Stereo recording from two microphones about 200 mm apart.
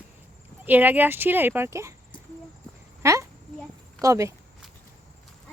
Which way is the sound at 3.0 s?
15° right (ahead or behind).